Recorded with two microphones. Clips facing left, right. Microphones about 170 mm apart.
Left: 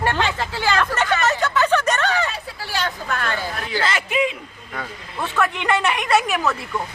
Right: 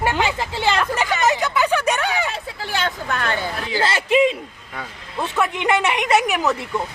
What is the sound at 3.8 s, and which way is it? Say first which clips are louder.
Speech: right 5 dB; 30° right (ahead or behind).